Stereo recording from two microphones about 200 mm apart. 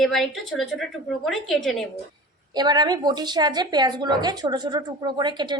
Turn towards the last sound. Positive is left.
turn(degrees=-20)  # may be behind; listen again after turning